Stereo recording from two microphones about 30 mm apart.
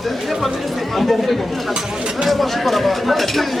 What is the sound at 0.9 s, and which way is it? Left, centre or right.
Speech, centre.